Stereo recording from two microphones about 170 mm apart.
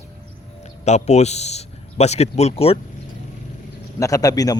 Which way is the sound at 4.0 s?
20° left (ahead or behind).